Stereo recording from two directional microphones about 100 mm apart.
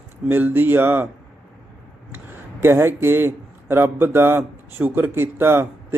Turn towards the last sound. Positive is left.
turn(degrees=-25)  # may be behind; listen again after turning